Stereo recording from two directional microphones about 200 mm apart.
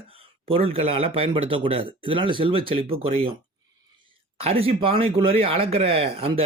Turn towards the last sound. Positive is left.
turn(degrees=-30)  # may be behind; listen again after turning